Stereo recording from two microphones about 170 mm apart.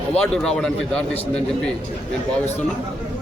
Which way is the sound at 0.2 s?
5° left (ahead or behind).